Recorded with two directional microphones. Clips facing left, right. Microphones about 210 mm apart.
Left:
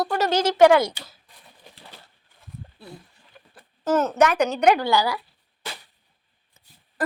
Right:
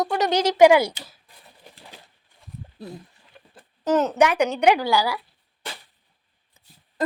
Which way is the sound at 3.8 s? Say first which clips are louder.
Right 1 dB; 15° right (ahead or behind).